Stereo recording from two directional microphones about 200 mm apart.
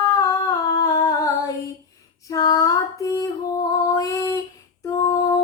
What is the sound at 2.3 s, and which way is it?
Female singing, 15° left (ahead or behind).